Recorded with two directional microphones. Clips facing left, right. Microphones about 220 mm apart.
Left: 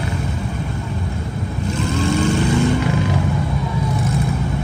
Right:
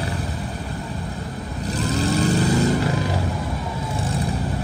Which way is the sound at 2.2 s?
40° right (ahead or behind).